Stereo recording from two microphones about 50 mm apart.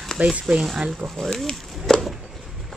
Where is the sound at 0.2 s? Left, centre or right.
Centre.